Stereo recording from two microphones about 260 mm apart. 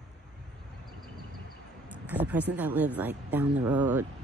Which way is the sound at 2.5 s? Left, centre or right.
Centre.